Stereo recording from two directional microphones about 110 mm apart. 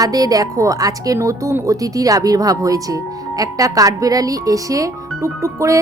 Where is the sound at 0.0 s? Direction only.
35° right (ahead or behind).